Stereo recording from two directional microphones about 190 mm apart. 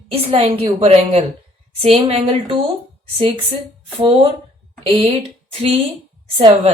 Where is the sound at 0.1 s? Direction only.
30° right (ahead or behind).